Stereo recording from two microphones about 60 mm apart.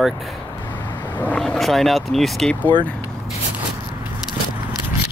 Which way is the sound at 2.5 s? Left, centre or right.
Left.